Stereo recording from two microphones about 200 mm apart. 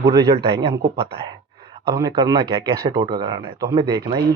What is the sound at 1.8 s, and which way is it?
Speech, 20° right (ahead or behind).